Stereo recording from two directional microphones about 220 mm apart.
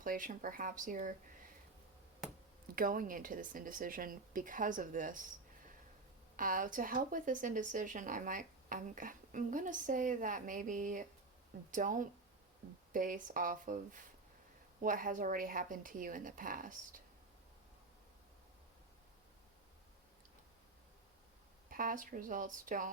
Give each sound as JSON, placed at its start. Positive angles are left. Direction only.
{"t": 0.0, "sound": "speech", "side_deg": -40}
{"t": 2.7, "sound": "speech", "side_deg": -40}
{"t": 21.7, "sound": "speech", "side_deg": -40}